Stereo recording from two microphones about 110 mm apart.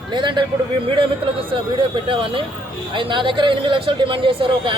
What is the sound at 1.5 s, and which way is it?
Speech, 50° right (ahead or behind).